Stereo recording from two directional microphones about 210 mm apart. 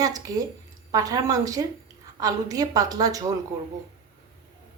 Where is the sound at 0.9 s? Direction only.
20° right (ahead or behind).